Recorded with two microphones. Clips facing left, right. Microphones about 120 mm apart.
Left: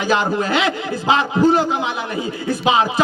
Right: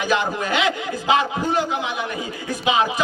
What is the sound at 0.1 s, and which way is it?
A man's voice, 35° left (ahead or behind).